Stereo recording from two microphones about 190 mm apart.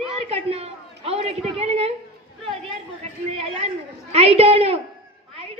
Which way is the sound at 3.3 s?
30° right (ahead or behind).